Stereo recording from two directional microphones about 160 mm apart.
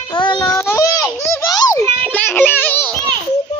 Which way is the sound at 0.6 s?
15° left (ahead or behind).